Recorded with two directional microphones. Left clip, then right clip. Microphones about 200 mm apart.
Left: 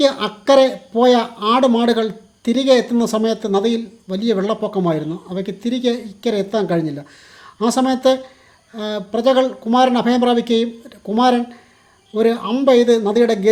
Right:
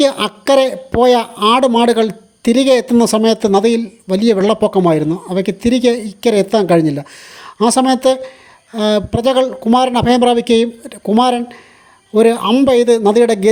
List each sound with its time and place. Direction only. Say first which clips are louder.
0.0 s speech: right 3 dB; 40° right (ahead or behind)